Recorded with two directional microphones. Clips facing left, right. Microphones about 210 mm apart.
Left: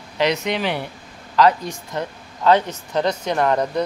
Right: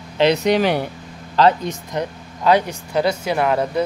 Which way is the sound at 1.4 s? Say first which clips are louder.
Right 1 dB; 30° right (ahead or behind).